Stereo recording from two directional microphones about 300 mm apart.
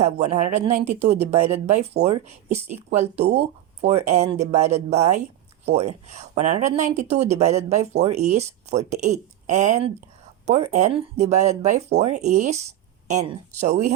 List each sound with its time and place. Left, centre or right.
0.0 s speech: right